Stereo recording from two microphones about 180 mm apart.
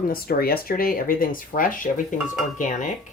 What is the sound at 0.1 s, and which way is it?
Speech, 55° left (ahead or behind).